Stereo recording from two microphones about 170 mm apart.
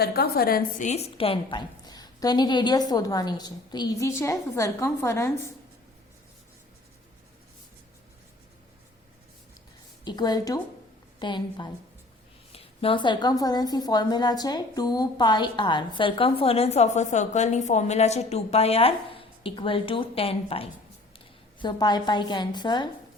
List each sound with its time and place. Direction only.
0.0 s a woman's voice: 65° left (ahead or behind)
0.9 s a woman's voice: 35° left (ahead or behind); by 5.3 s 15° left (ahead or behind)
10.0 s a woman's voice: 25° left (ahead or behind)